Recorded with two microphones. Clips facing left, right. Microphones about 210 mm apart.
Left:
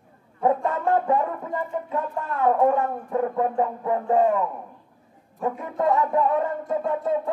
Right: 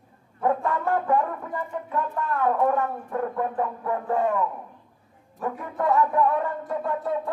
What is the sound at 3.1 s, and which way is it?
Music, 20° left (ahead or behind).